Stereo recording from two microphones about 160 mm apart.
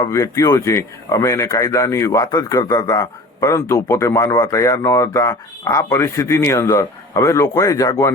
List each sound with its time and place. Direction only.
0.0 s a man's voice: 20° left (ahead or behind)